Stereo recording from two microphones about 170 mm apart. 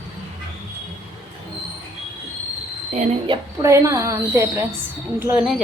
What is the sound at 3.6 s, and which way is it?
A woman's voice, 15° right (ahead or behind).